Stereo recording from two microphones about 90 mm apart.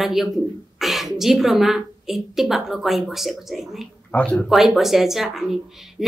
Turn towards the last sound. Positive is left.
turn(degrees=-5)  # may be behind; listen again after turning